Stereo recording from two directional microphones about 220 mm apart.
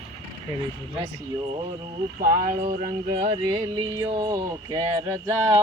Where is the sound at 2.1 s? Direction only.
40° right (ahead or behind).